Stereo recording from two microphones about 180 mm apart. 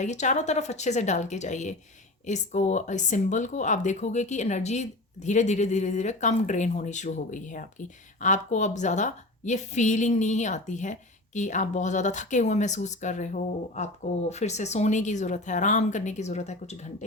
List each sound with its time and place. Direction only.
0.0 s speech: 40° left (ahead or behind)